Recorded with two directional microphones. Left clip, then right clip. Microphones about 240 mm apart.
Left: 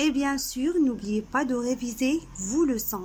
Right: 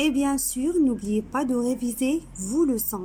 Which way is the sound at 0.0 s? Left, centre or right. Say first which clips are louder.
Right 2 dB; centre.